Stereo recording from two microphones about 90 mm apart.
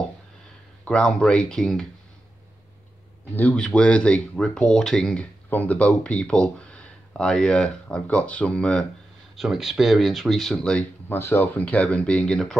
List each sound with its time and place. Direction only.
0.8 s speech: 10° left (ahead or behind)
3.3 s speech: 15° left (ahead or behind)
5.5 s speech: 20° left (ahead or behind)
9.4 s speech: 5° right (ahead or behind)
11.1 s speech: 25° left (ahead or behind); by 12.5 s 5° left (ahead or behind)